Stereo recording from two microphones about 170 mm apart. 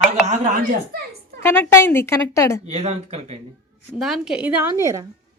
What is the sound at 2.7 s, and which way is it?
Speech, 40° right (ahead or behind).